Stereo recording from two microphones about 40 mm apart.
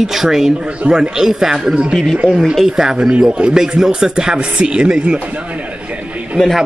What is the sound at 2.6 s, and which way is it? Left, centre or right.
Speech, centre.